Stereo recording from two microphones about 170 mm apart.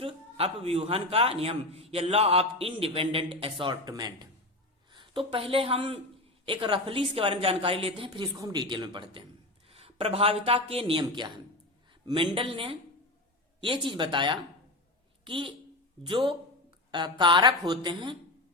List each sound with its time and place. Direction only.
0.0 s a man's voice: 35° right (ahead or behind)